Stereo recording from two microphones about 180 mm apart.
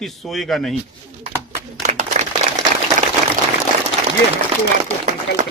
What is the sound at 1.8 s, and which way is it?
Applause, 40° right (ahead or behind).